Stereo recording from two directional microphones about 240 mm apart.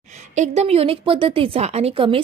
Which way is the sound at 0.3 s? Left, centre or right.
Right.